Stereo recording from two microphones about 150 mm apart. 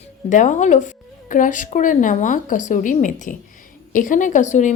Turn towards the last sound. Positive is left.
turn(degrees=55)  # may be behind; listen again after turning